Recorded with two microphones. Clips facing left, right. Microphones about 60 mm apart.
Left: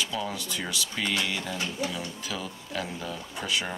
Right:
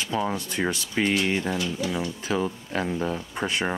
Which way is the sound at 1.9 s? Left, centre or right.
Right.